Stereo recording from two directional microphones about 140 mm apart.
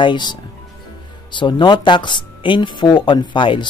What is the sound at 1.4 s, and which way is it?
Speech, 35° left (ahead or behind).